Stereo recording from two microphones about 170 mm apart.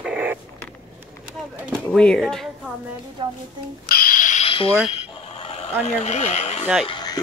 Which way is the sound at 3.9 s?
55° left (ahead or behind).